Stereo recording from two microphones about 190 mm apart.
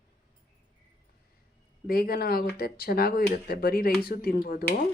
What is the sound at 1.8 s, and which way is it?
A woman's voice, 50° left (ahead or behind).